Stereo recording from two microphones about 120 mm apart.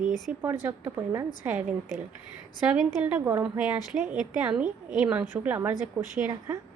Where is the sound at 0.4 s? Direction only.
20° right (ahead or behind).